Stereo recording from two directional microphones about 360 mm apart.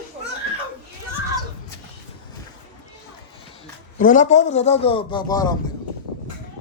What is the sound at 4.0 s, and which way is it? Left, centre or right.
A man's voice, left.